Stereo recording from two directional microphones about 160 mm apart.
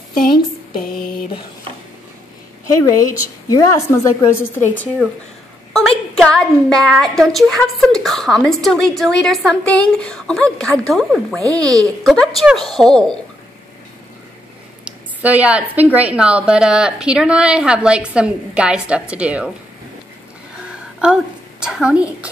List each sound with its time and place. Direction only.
0.1 s a sound: 65° left (ahead or behind)
3.4 s a woman's voice: 20° left (ahead or behind)
5.7 s a woman's voice: 5° left (ahead or behind)
14.9 s a woman's voice: 10° right (ahead or behind)
21.0 s a woman's voice: 5° right (ahead or behind)